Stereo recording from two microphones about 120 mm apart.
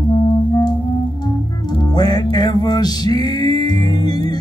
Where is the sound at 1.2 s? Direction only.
35° left (ahead or behind).